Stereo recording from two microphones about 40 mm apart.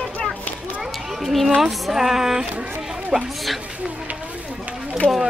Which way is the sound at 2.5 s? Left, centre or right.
Right.